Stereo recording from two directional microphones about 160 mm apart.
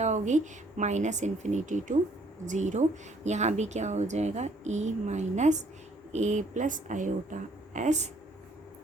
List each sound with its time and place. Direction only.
0.0 s a woman's voice: 50° right (ahead or behind)